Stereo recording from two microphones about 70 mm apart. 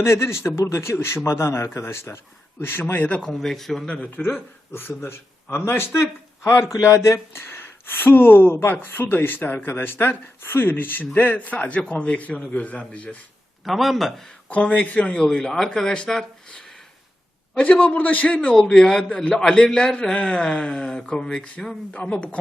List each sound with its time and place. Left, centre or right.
0.0 s a man's voice: left
3.3 s a man's voice: centre
3.8 s a man's voice: centre
4.1 s speech: left
13.7 s a man's voice: centre
14.5 s a man's voice: centre
17.6 s speech: centre
18.3 s a man's voice: centre